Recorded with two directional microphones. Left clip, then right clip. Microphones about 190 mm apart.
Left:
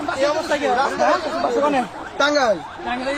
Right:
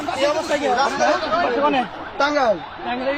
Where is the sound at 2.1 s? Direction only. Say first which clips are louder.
Left 1 dB; 40° left (ahead or behind).